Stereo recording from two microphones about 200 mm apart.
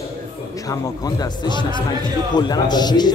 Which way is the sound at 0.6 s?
15° left (ahead or behind).